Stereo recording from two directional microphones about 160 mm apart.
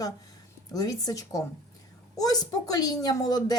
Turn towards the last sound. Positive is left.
turn(degrees=25)  # may be behind; listen again after turning